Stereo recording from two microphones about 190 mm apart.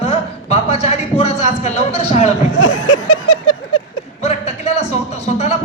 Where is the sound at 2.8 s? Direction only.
85° left.